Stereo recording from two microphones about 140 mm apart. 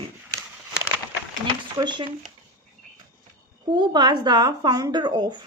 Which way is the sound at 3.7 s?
35° right (ahead or behind).